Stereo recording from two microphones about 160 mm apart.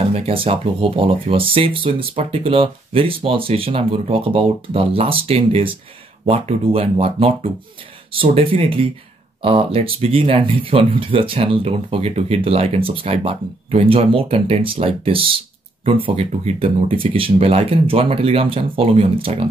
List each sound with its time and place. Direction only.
0.0 s speech: 40° right (ahead or behind)